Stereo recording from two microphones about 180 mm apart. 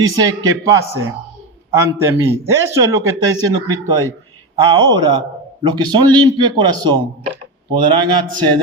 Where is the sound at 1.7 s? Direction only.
15° right (ahead or behind).